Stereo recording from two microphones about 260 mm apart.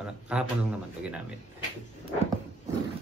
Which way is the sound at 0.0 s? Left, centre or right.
Centre.